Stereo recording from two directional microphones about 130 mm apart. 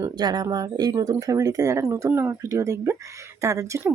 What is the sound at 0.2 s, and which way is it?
Speech, 30° right (ahead or behind).